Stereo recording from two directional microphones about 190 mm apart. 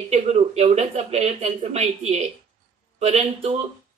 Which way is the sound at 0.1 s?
35° right (ahead or behind).